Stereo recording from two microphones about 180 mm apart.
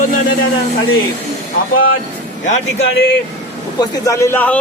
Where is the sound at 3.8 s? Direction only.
20° left (ahead or behind).